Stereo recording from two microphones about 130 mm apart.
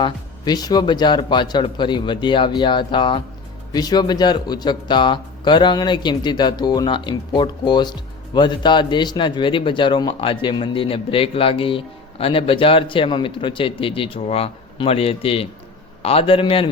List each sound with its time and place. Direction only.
0.0 s a man's voice: 30° left (ahead or behind)